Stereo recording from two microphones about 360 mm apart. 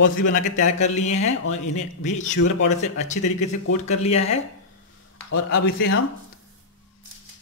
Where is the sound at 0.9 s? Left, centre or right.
Centre.